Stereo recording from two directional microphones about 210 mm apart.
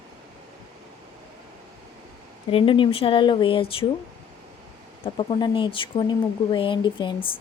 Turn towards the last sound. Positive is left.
turn(degrees=20)  # may be behind; listen again after turning